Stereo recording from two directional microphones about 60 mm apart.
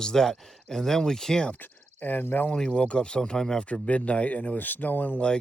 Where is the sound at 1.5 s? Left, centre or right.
Left.